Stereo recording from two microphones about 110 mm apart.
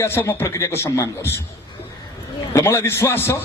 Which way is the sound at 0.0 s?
25° left (ahead or behind).